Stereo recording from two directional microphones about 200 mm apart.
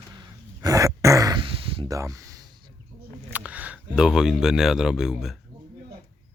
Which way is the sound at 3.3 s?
5° right (ahead or behind).